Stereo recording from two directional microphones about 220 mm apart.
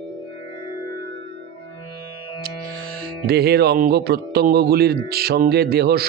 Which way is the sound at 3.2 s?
45° right (ahead or behind).